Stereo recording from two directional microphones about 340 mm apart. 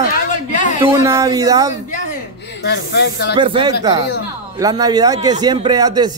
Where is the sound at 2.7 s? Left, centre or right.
Left.